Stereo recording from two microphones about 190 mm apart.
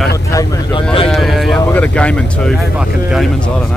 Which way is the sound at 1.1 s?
Centre (ahead or behind).